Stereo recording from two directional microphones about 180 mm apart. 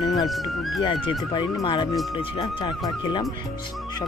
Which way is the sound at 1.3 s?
25° left (ahead or behind).